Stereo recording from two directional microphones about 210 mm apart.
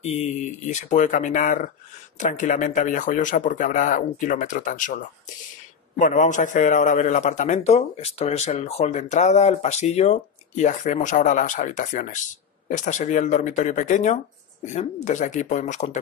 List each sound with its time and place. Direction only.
0.0 s a man's voice: 30° left (ahead or behind)